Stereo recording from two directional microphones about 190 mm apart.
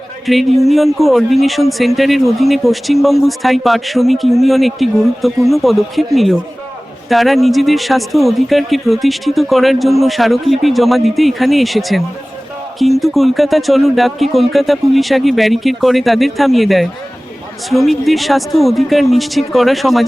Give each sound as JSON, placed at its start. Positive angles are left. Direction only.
{"t": 0.3, "sound": "speech", "side_deg": 0}
{"t": 7.1, "sound": "speech", "side_deg": 0}